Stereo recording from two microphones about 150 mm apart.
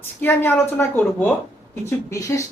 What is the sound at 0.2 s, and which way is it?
Speech, 15° left (ahead or behind).